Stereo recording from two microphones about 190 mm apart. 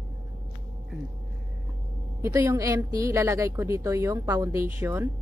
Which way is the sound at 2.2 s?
15° right (ahead or behind).